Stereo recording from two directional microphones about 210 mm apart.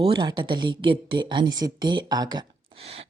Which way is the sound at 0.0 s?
20° right (ahead or behind).